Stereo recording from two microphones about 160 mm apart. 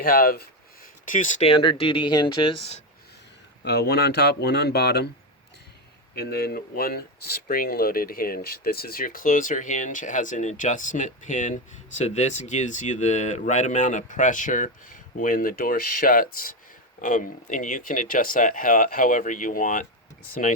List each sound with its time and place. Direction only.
0.0 s speech: 65° left (ahead or behind); by 1.5 s 50° left (ahead or behind)
1.5 s speech: 35° left (ahead or behind)
3.6 s speech: 90° left
6.1 s speech: 80° left; by 19.9 s 55° left (ahead or behind)